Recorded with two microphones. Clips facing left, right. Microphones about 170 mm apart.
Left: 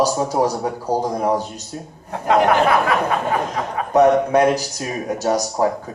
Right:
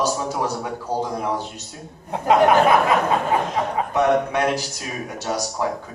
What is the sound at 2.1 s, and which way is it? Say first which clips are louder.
Speech: even; 20° right (ahead or behind).